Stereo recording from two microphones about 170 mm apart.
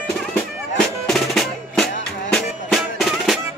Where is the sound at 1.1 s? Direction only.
Centre (ahead or behind).